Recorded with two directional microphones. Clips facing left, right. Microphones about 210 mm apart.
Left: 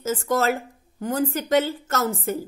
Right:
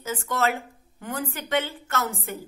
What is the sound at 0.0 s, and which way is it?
Speech, 40° left (ahead or behind).